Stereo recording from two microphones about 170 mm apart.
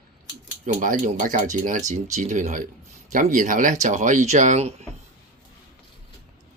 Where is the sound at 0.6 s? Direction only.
50° right (ahead or behind).